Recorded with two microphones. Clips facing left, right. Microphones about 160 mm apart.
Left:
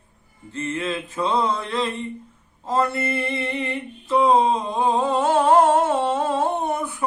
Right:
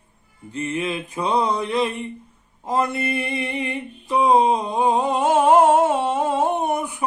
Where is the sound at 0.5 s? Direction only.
15° right (ahead or behind).